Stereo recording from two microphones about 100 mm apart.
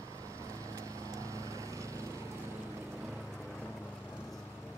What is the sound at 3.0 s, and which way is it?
Vehicle, centre (ahead or behind).